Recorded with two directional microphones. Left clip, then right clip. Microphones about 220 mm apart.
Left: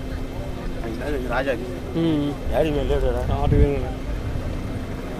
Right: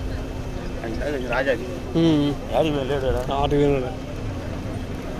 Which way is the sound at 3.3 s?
50° right (ahead or behind).